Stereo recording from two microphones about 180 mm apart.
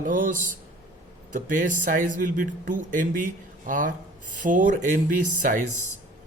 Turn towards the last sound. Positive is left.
turn(degrees=-45)  # may be behind; listen again after turning